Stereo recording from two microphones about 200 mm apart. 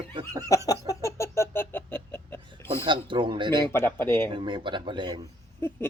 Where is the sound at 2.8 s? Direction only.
25° right (ahead or behind).